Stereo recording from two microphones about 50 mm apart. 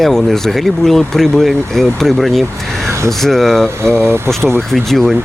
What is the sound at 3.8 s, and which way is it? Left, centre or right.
Speech, right.